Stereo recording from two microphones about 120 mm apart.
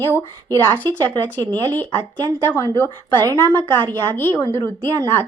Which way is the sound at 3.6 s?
15° left (ahead or behind).